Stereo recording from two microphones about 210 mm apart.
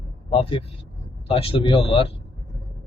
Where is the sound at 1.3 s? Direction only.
25° left (ahead or behind).